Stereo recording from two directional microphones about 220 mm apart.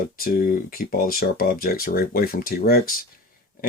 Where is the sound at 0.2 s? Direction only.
40° left (ahead or behind).